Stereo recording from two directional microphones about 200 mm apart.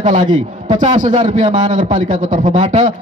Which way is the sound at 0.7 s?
40° right (ahead or behind).